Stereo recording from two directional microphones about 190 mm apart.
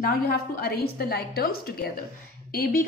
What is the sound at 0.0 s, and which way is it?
A woman's voice, 55° left (ahead or behind).